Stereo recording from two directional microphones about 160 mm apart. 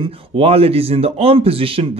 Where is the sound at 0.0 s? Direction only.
35° right (ahead or behind).